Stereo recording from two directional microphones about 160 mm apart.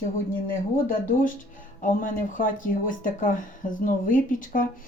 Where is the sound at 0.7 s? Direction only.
60° left (ahead or behind).